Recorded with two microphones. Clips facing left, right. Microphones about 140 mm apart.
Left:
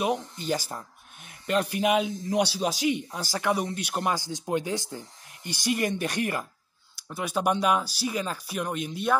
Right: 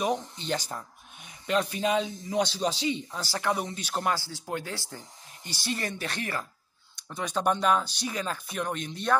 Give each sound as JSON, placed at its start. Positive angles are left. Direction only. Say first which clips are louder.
{"t": 0.0, "sound": "speech", "louder": "left 1 dB", "side_deg": 5}